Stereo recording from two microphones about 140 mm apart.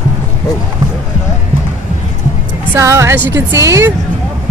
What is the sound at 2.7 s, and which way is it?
Speech, 20° right (ahead or behind).